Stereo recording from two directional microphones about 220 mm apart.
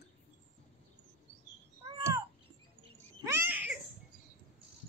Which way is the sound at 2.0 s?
15° right (ahead or behind).